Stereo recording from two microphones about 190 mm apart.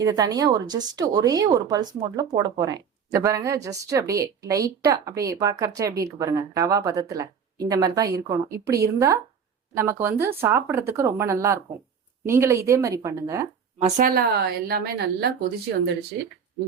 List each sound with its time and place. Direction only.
0.0 s speech: 20° right (ahead or behind)
13.8 s a woman's voice: 45° right (ahead or behind)